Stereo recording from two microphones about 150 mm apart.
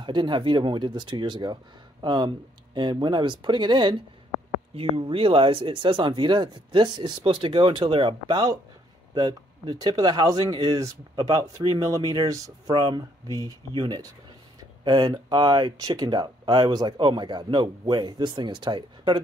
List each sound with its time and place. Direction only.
0.0 s speech: 30° right (ahead or behind)